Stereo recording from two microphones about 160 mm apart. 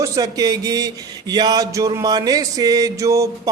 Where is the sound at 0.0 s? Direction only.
25° right (ahead or behind).